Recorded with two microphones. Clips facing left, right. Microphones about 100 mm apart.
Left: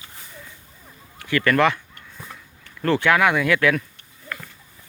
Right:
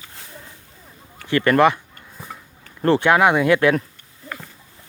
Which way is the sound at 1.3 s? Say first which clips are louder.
Right 3 dB; 25° right (ahead or behind).